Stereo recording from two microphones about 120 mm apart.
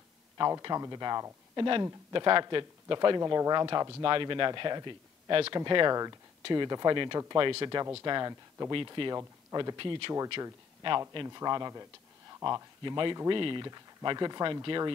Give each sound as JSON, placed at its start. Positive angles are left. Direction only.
{"t": 0.4, "sound": "speech", "side_deg": -35}
{"t": 1.6, "sound": "speech", "side_deg": -40}
{"t": 8.8, "sound": "speech", "side_deg": -40}
{"t": 9.1, "sound": "speech", "side_deg": -30}
{"t": 12.3, "sound": "a sound", "side_deg": -30}
{"t": 12.8, "sound": "speech", "side_deg": -40}